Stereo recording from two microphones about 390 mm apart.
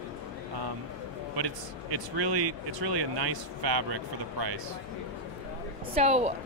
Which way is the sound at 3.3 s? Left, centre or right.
Right.